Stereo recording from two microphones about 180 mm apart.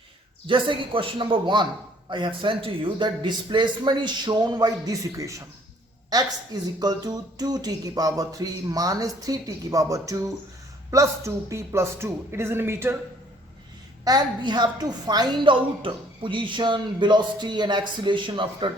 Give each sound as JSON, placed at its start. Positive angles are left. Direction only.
{"t": 0.4, "sound": "a woman's voice", "side_deg": -30}
{"t": 14.0, "sound": "a woman's voice", "side_deg": -20}